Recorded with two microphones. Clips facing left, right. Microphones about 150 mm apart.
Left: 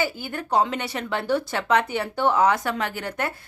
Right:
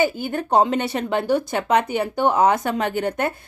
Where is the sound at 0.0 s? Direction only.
20° right (ahead or behind).